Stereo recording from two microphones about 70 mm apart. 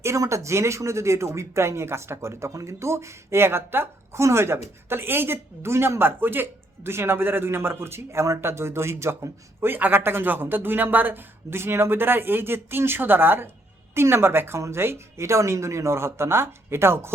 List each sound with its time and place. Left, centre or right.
0.0 s speech: right
9.7 s speech: right